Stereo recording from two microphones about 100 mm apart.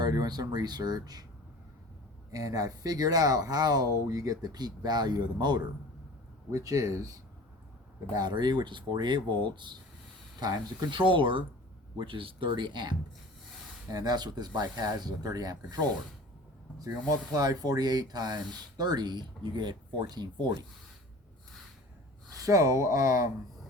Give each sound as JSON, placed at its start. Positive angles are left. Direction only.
{"t": 0.0, "sound": "speech", "side_deg": -45}
{"t": 2.3, "sound": "speech", "side_deg": -40}
{"t": 6.5, "sound": "speech", "side_deg": -35}
{"t": 8.1, "sound": "speech", "side_deg": -45}
{"t": 10.4, "sound": "speech", "side_deg": -40}
{"t": 11.1, "sound": "speech", "side_deg": -55}
{"t": 22.4, "sound": "speech", "side_deg": -35}